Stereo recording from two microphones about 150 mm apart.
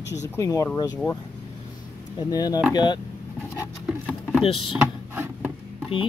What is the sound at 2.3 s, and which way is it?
Speech, 25° left (ahead or behind).